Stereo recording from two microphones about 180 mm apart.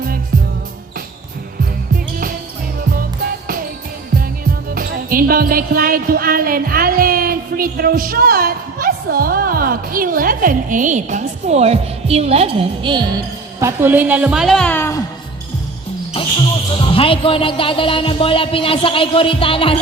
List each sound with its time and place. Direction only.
3.0 s music: 55° right (ahead or behind)
4.7 s music: 50° right (ahead or behind); by 13.1 s 25° right (ahead or behind)
13.6 s a woman's voice: 15° right (ahead or behind); by 15.0 s 15° left (ahead or behind)
16.7 s speech: 30° left (ahead or behind)